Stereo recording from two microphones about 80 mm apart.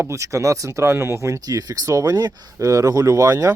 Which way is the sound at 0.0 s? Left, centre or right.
Right.